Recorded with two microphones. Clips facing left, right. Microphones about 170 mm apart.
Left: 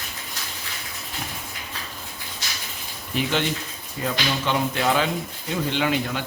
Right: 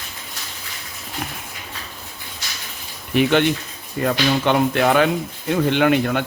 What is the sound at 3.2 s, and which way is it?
A man's voice, 60° right (ahead or behind).